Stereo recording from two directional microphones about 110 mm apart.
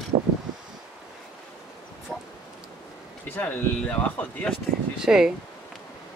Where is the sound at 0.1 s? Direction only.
70° right (ahead or behind).